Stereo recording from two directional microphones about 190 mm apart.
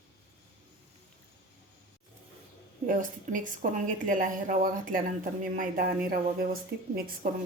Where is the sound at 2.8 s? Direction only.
45° right (ahead or behind).